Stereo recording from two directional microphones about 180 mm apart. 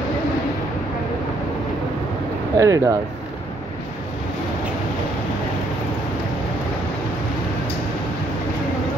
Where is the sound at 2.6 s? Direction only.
20° right (ahead or behind).